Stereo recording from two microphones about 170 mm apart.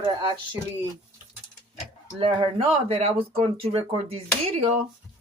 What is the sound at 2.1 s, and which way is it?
Speech, 30° right (ahead or behind).